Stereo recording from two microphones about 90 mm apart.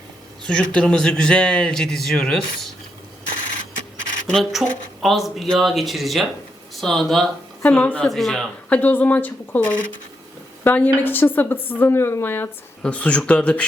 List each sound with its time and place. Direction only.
0.4 s speech: 10° left (ahead or behind)
4.3 s speech: 5° left (ahead or behind)
7.6 s speech: 15° left (ahead or behind)
8.0 s speech: 5° left (ahead or behind)
8.7 s a woman's voice: 20° left (ahead or behind)
12.8 s speech: 15° left (ahead or behind)